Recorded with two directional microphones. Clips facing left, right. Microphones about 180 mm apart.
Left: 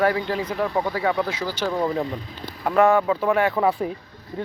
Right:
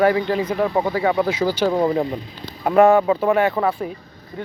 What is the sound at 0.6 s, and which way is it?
Speech, 20° right (ahead or behind).